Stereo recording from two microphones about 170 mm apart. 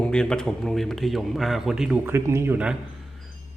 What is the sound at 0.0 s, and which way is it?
A man's voice, 5° left (ahead or behind).